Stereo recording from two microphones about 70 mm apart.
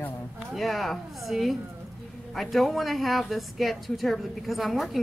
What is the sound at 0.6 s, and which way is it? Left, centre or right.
A woman's voice, centre.